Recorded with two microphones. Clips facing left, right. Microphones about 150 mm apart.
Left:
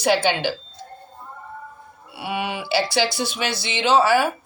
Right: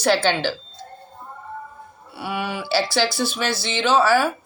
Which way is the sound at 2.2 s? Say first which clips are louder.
Even; 20° left (ahead or behind).